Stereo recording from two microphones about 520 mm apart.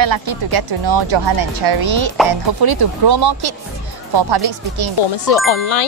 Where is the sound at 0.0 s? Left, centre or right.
Right.